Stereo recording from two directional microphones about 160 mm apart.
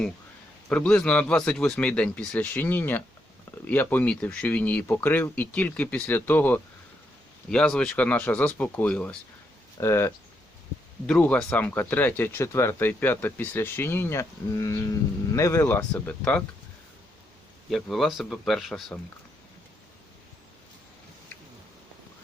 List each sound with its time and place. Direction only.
0.7 s speech: 5° left (ahead or behind)
17.7 s speech: centre (ahead or behind)